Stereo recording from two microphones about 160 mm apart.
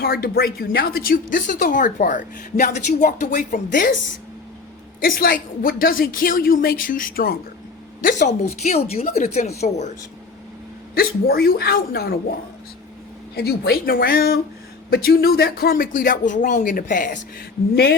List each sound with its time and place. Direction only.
0.0 s a woman's voice: 70° left (ahead or behind); by 3.9 s 55° left (ahead or behind)
4.9 s a woman's voice: 65° left (ahead or behind)
8.0 s a woman's voice: 50° left (ahead or behind)
10.9 s a woman's voice: 70° left (ahead or behind)
13.3 s a woman's voice: 80° left; by 17.2 s 55° left (ahead or behind)